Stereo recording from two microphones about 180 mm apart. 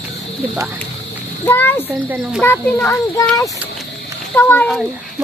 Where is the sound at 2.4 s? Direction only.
10° left (ahead or behind).